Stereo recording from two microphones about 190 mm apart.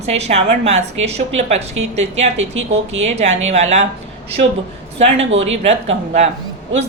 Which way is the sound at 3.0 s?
35° right (ahead or behind).